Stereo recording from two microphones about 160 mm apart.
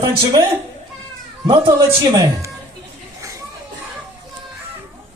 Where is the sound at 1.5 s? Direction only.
30° right (ahead or behind).